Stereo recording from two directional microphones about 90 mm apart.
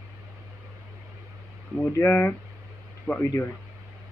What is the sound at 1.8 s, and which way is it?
Speech, 20° left (ahead or behind).